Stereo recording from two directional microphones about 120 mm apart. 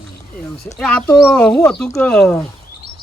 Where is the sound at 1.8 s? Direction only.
25° left (ahead or behind).